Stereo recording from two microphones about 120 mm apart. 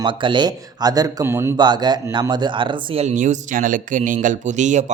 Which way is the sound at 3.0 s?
75° right (ahead or behind).